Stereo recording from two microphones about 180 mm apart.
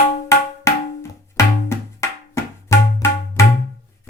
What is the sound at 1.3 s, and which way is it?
Music, 15° left (ahead or behind).